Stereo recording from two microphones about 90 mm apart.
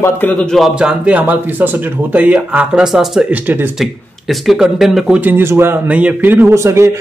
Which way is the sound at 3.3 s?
20° right (ahead or behind).